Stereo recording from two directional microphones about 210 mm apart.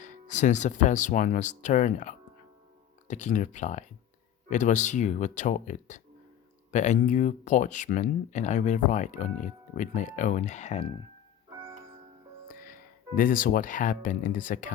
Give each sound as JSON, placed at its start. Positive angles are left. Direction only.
{"t": 0.0, "sound": "speech", "side_deg": 35}
{"t": 12.5, "sound": "speech", "side_deg": 40}